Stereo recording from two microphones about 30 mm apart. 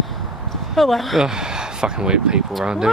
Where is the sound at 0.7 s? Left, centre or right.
Centre.